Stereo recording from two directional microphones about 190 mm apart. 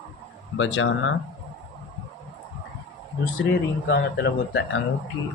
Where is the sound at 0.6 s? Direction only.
85° left.